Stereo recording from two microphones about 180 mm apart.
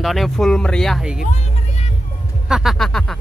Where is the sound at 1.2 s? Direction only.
40° left (ahead or behind).